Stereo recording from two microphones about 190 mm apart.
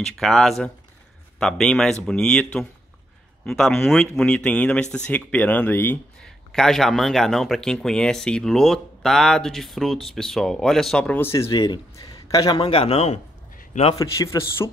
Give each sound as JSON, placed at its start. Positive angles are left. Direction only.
{"t": 0.2, "sound": "a man's voice", "side_deg": 0}
{"t": 13.9, "sound": "speech", "side_deg": 15}